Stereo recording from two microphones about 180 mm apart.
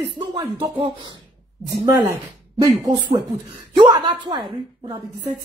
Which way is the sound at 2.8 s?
25° right (ahead or behind).